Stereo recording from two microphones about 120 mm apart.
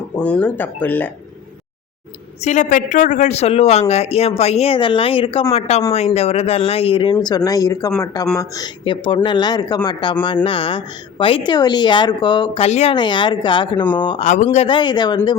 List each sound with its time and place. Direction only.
0.2 s speech: 10° left (ahead or behind)
2.4 s a woman's voice: 85° left; by 4.8 s 60° left (ahead or behind)
4.8 s speech: 45° left (ahead or behind)
8.8 s speech: 45° left (ahead or behind)
11.5 s speech: 35° left (ahead or behind)
12.6 s a woman's voice: 65° left (ahead or behind)
12.9 s speech: 40° left (ahead or behind)
14.2 s speech: 90° left
14.7 s speech: 40° left (ahead or behind)